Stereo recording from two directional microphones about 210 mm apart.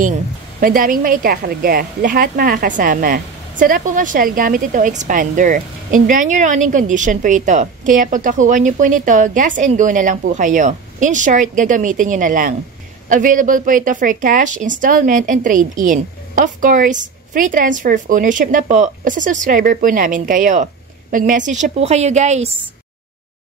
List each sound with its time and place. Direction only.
0.6 s a woman's voice: 40° right (ahead or behind)